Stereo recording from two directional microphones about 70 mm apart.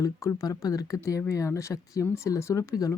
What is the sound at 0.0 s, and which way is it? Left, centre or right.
Speech, left.